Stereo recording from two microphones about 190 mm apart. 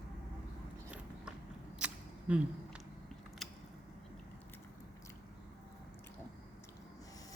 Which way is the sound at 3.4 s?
Centre (ahead or behind).